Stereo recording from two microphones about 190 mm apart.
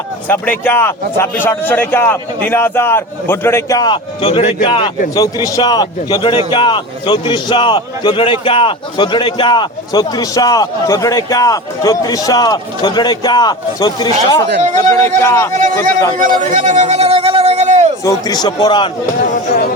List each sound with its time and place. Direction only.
0.3 s a man's voice: 10° left (ahead or behind)
16.1 s a sound: 45° right (ahead or behind)
18.0 s a man's voice: 20° left (ahead or behind)